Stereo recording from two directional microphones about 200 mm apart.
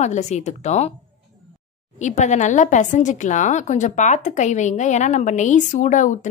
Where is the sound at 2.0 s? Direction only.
35° left (ahead or behind).